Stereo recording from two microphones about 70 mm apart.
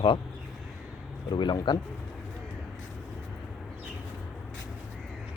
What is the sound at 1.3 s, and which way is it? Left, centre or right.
Speech, left.